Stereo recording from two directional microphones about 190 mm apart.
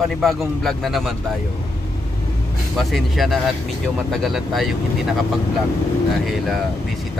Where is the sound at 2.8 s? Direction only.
Centre (ahead or behind).